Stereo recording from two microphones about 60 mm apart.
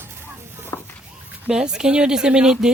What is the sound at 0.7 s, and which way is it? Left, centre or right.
Speech, left.